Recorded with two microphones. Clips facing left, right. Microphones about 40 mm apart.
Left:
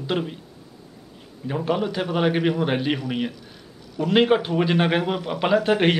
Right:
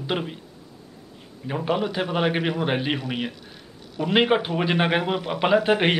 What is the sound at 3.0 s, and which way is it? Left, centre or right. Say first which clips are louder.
Speech: left 2 dB; right.